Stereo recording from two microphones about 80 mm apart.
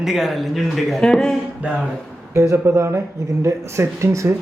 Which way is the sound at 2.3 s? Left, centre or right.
Right.